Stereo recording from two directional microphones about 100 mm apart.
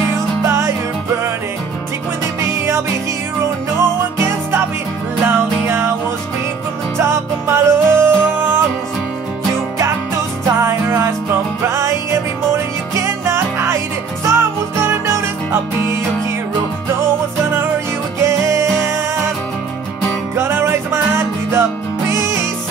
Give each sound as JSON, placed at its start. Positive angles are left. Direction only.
{"t": 0.5, "sound": "music", "side_deg": -25}
{"t": 4.2, "sound": "music", "side_deg": -25}
{"t": 7.0, "sound": "music", "side_deg": -25}
{"t": 10.4, "sound": "music", "side_deg": -25}
{"t": 18.2, "sound": "music", "side_deg": -25}
{"t": 20.3, "sound": "music", "side_deg": -25}